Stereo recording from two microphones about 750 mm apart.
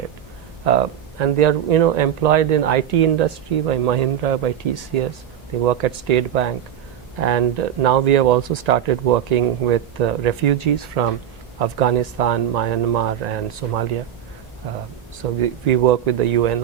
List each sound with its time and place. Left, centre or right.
0.7 s speech: right
15.4 s speech: right